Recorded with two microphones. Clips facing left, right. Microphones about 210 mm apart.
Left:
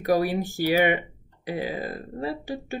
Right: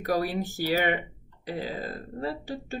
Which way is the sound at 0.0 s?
15° left (ahead or behind).